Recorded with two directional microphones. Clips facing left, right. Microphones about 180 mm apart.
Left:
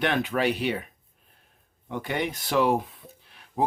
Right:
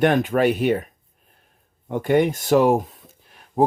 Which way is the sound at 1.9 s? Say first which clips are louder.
Right 11 dB; 45° right (ahead or behind).